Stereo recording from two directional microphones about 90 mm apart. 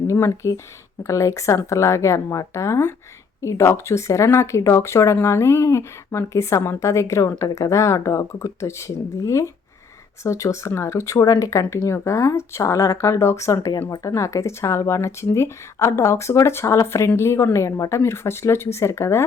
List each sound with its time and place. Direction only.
0.1 s speech: 35° left (ahead or behind)